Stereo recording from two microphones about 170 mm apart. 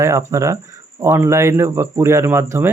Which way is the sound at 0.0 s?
15° right (ahead or behind).